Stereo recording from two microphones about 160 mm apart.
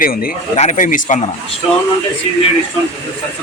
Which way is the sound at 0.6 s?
50° left (ahead or behind).